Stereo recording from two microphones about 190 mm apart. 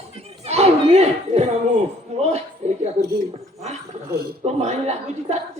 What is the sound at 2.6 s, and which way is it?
Speech, 35° right (ahead or behind).